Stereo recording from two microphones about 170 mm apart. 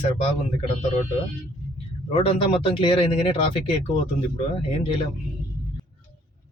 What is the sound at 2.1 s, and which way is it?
Speech, 35° left (ahead or behind).